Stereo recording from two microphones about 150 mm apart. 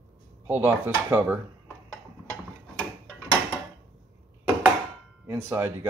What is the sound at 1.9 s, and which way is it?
Mechanisms, 10° left (ahead or behind).